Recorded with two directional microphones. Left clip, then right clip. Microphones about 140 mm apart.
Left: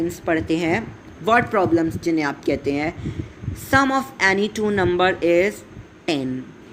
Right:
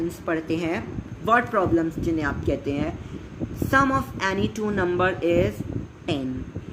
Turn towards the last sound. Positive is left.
turn(degrees=45)  # may be behind; listen again after turning